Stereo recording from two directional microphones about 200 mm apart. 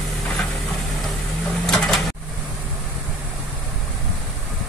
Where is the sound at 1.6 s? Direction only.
Centre (ahead or behind).